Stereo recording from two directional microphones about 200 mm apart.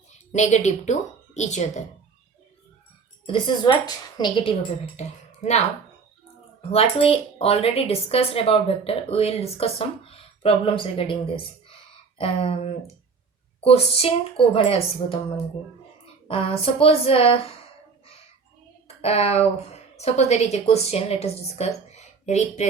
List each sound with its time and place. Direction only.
0.3 s a woman's voice: 35° left (ahead or behind)
3.2 s speech: 25° left (ahead or behind)
4.9 s speech: 35° left (ahead or behind)
6.6 s speech: 30° left (ahead or behind)
16.3 s speech: 30° left (ahead or behind)
19.0 s a woman's voice: 30° left (ahead or behind)